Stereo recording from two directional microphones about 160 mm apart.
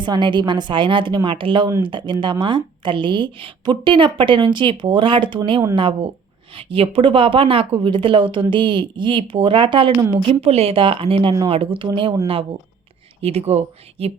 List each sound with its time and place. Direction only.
0.0 s speech: 30° right (ahead or behind)
13.2 s speech: 40° right (ahead or behind)